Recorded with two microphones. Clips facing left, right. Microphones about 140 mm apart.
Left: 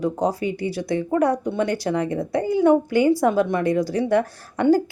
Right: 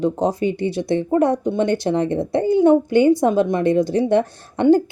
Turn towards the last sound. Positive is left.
turn(degrees=-25)  # may be behind; listen again after turning